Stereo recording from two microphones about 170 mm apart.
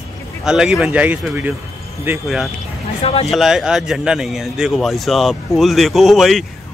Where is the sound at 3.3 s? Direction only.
Centre (ahead or behind).